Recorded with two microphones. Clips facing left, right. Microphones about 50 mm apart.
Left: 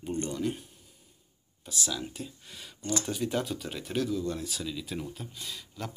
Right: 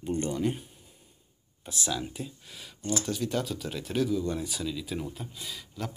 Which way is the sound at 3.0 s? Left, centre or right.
Centre.